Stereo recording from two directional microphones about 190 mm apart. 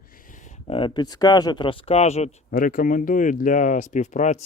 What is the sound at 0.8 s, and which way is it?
Speech, 25° left (ahead or behind).